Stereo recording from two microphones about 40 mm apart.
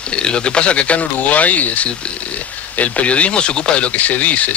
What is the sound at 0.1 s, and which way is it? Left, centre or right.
Speech, left.